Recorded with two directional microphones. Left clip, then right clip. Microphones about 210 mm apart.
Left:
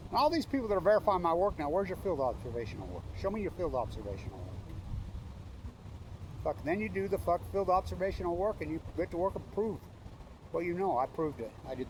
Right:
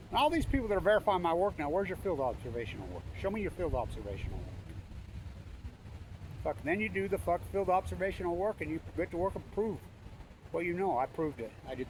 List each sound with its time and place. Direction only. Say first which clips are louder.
0.1 s speech: even; 20° right (ahead or behind)
0.5 s speech: left 1 dB; 5° right (ahead or behind)
6.4 s speech: even; 5° right (ahead or behind)